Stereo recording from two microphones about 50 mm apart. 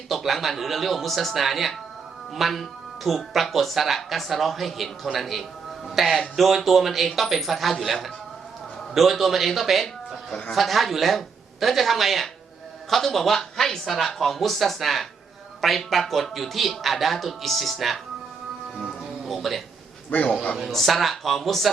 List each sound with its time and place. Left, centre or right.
0.1 s speech: centre
9.0 s speech: centre
18.8 s music: centre
20.1 s a man's voice: left
20.7 s speech: centre